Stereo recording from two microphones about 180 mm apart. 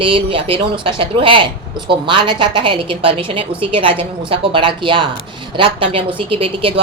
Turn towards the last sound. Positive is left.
turn(degrees=-30)  # may be behind; listen again after turning